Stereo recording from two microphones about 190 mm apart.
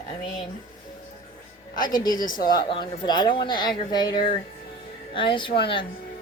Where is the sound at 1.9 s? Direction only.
20° left (ahead or behind).